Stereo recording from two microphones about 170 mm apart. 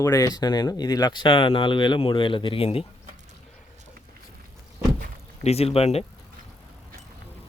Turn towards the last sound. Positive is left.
turn(degrees=35)  # may be behind; listen again after turning